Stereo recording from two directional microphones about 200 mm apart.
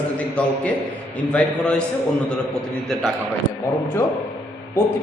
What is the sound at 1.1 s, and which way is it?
A man's voice, 5° left (ahead or behind).